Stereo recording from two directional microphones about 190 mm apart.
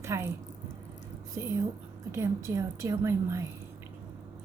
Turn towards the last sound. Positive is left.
turn(degrees=-15)  # may be behind; listen again after turning